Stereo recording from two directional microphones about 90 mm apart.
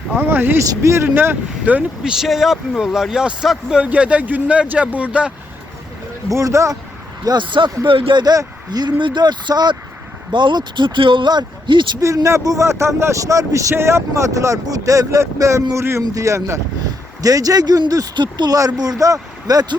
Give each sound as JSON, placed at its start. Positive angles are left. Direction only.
{"t": 0.2, "sound": "speech", "side_deg": -25}
{"t": 0.6, "sound": "speech", "side_deg": -35}
{"t": 2.1, "sound": "speech", "side_deg": 0}
{"t": 6.3, "sound": "speech", "side_deg": -35}
{"t": 7.3, "sound": "speech", "side_deg": -60}
{"t": 7.9, "sound": "speech", "side_deg": -75}
{"t": 8.2, "sound": "speech", "side_deg": -45}
{"t": 11.9, "sound": "speech", "side_deg": -40}
{"t": 18.5, "sound": "speech", "side_deg": -40}